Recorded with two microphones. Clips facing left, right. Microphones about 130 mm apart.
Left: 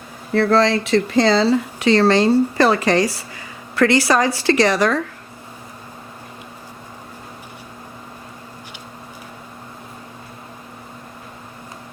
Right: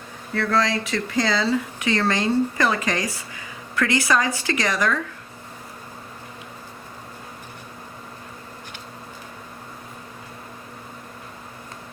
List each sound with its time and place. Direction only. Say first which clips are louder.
0.3 s speech: left 7 dB; 30° left (ahead or behind)